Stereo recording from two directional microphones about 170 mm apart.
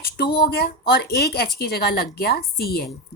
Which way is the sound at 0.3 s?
65° left (ahead or behind).